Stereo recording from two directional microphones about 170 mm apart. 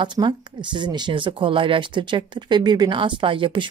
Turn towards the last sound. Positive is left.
turn(degrees=-30)  # may be behind; listen again after turning